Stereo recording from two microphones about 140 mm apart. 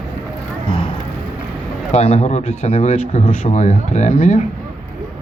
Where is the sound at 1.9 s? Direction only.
50° left (ahead or behind).